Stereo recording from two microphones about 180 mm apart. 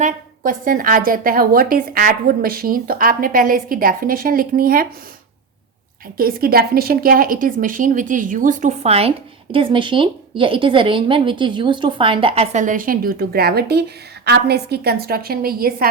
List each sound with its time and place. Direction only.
0.0 s a woman's voice: 50° right (ahead or behind)
6.1 s a woman's voice: 55° right (ahead or behind)